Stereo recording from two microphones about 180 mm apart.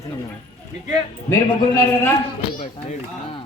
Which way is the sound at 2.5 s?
30° left (ahead or behind).